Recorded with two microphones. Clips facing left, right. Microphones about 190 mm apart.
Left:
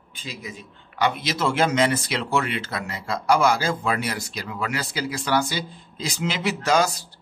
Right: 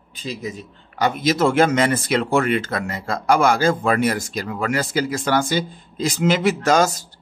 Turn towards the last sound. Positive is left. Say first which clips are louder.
# right 4 dB
turn(degrees=-45)  # may be behind; listen again after turning